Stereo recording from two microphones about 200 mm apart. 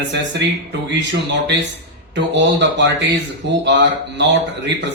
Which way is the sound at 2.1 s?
60° right (ahead or behind).